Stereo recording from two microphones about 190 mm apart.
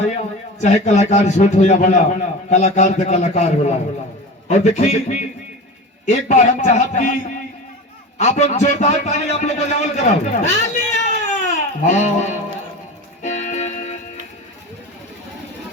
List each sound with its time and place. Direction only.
0.6 s a man's voice: 35° left (ahead or behind)
8.2 s a man's voice: 40° left (ahead or behind)
13.2 s music: 40° left (ahead or behind)